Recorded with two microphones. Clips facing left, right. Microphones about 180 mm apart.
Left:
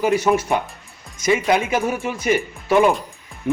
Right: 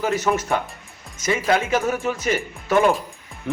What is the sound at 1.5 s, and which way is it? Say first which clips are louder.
Speech: left 1 dB; 15° left (ahead or behind).